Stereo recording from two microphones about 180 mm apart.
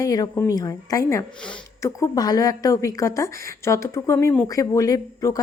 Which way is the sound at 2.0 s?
20° left (ahead or behind).